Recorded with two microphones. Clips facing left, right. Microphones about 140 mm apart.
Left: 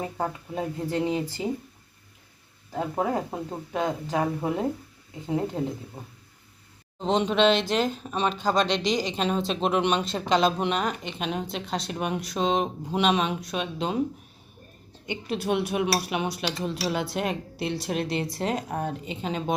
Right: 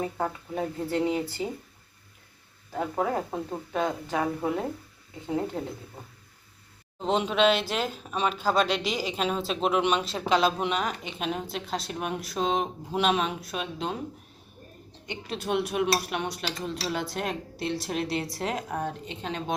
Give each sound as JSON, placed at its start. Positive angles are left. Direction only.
{"t": 0.0, "sound": "speech", "side_deg": 15}
{"t": 2.7, "sound": "speech", "side_deg": 15}
{"t": 5.3, "sound": "speech", "side_deg": 15}
{"t": 7.0, "sound": "speech", "side_deg": -5}
{"t": 15.0, "sound": "speech", "side_deg": 5}